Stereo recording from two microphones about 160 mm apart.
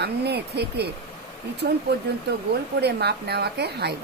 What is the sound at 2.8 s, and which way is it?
Speech, 90° right.